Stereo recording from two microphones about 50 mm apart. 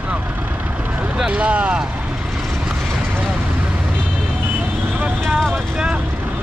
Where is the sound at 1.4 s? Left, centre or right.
Right.